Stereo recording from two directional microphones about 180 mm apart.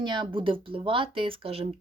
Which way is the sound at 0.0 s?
25° right (ahead or behind).